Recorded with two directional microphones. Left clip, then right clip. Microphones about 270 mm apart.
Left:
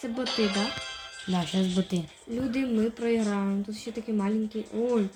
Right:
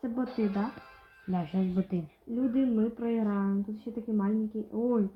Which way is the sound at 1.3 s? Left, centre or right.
Centre.